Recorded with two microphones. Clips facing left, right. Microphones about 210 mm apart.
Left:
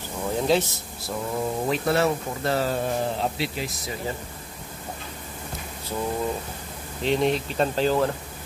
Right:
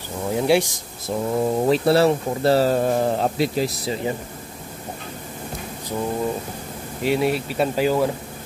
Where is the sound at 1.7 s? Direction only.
35° right (ahead or behind).